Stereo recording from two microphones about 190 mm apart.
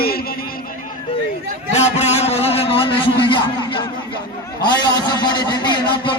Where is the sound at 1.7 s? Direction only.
35° left (ahead or behind).